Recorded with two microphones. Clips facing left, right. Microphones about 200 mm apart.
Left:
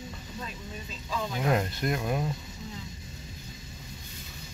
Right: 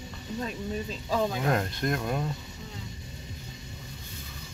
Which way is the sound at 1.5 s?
5° left (ahead or behind).